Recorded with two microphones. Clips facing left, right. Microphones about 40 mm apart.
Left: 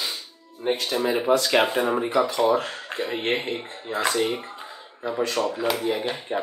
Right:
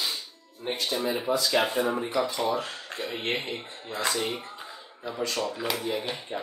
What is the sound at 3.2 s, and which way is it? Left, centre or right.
Speech, left.